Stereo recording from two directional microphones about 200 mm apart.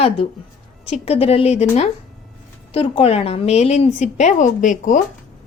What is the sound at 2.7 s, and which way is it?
Speech, 30° left (ahead or behind).